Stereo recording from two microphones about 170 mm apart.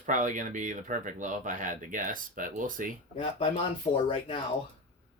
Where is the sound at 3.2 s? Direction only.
35° left (ahead or behind).